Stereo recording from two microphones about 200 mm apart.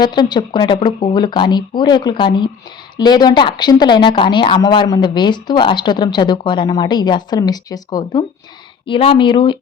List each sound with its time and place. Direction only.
0.0 s speech: 20° left (ahead or behind)